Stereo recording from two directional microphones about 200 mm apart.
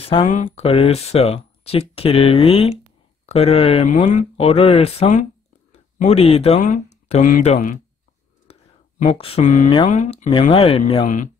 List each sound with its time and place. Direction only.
0.0 s speech: 30° left (ahead or behind)
8.5 s a sound: 30° left (ahead or behind)
9.0 s speech: 30° left (ahead or behind)